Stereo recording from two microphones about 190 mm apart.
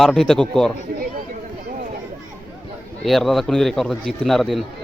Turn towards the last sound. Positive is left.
turn(degrees=0)  # may be behind; listen again after turning